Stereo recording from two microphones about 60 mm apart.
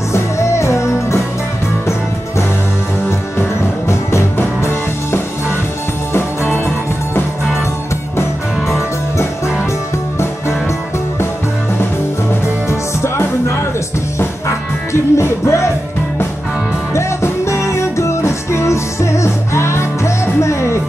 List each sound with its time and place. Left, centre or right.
0.1 s music: left
3.1 s music: left
12.6 s music: left
14.9 s music: left
16.9 s music: left